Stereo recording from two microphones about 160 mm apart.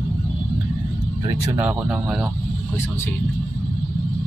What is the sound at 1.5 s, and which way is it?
Speech, 5° right (ahead or behind).